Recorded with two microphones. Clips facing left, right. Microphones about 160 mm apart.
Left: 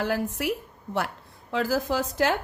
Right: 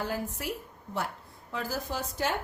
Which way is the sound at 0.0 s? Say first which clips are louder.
Left 7 dB; 75° left (ahead or behind).